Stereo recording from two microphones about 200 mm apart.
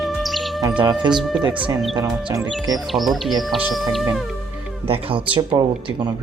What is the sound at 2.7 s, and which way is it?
Speech, centre (ahead or behind).